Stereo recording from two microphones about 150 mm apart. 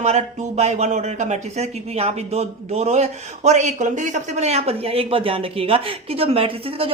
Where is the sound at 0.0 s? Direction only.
45° right (ahead or behind).